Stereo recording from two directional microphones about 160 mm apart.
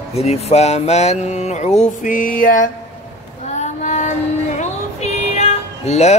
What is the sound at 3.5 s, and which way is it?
Female singing, 45° left (ahead or behind).